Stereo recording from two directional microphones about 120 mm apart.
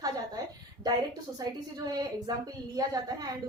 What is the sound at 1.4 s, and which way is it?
Speech, 30° right (ahead or behind).